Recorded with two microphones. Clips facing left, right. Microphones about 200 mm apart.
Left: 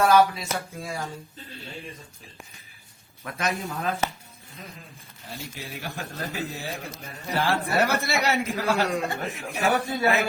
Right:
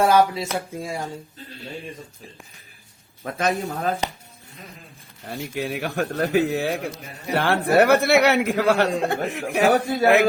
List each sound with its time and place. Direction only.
0.0 s speech: 25° right (ahead or behind)
3.2 s a man's voice: 30° right (ahead or behind)
4.0 s speech: 15° right (ahead or behind)
5.2 s a man's voice: 60° right (ahead or behind)
9.6 s a man's voice: 40° right (ahead or behind)